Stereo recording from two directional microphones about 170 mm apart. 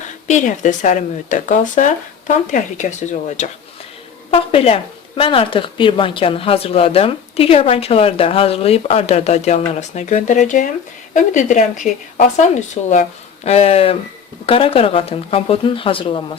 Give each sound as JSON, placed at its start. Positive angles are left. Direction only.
{"t": 0.3, "sound": "speech", "side_deg": 45}
{"t": 4.3, "sound": "speech", "side_deg": 35}